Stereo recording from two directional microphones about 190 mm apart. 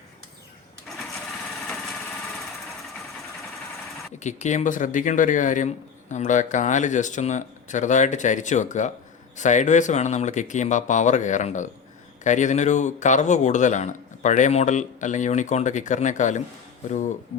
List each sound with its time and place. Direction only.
0.9 s lawn mower: centre (ahead or behind)
1.6 s a sound: 5° left (ahead or behind)
4.2 s speech: 40° left (ahead or behind)